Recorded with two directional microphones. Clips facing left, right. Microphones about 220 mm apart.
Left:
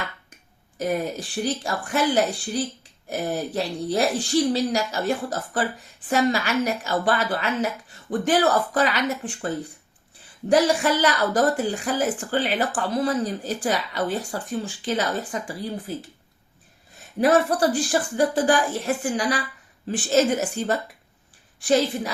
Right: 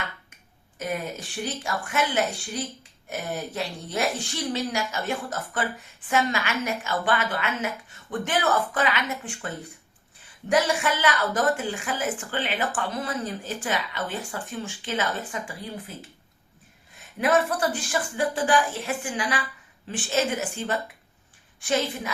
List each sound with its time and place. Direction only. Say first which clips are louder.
0.8 s a woman's voice: left 5 dB; 35° left (ahead or behind)
10.5 s a woman's voice: left 4 dB; 35° left (ahead or behind)
17.2 s a woman's voice: left 4 dB; 35° left (ahead or behind)